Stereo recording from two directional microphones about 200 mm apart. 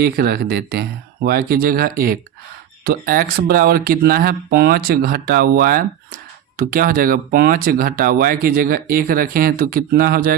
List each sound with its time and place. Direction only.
0.0 s speech: 50° right (ahead or behind)